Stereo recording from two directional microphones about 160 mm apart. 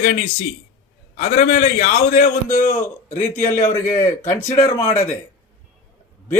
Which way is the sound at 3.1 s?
55° left (ahead or behind).